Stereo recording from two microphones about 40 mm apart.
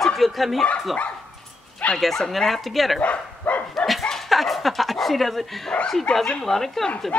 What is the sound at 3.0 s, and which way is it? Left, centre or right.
Bow-wow, left.